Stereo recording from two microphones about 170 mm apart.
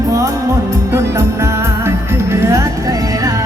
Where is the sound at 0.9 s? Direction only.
15° right (ahead or behind).